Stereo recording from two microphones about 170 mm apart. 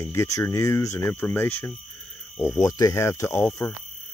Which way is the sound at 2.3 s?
15° left (ahead or behind).